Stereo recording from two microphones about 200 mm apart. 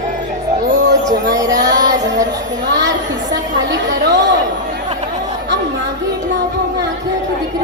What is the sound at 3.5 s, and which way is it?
Chatter, 65° right (ahead or behind).